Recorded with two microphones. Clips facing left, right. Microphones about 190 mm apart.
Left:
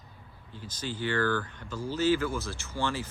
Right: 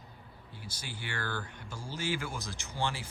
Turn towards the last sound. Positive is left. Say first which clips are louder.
# left 4 dB
turn(degrees=-15)  # may be behind; listen again after turning